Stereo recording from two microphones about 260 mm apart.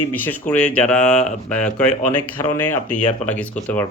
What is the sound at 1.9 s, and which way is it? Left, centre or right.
Speech, left.